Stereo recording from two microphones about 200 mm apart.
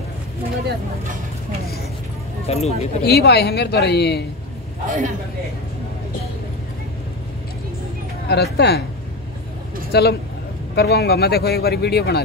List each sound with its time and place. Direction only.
2.4 s speech: 30° left (ahead or behind)
3.0 s a man's voice: 55° left (ahead or behind)
4.8 s a man's voice: 40° right (ahead or behind)
8.3 s a man's voice: 55° left (ahead or behind)
9.9 s a man's voice: 55° left (ahead or behind)